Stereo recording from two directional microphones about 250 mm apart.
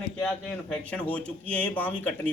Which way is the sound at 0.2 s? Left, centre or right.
Centre.